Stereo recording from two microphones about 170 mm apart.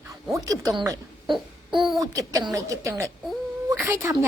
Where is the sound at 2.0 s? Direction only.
20° right (ahead or behind).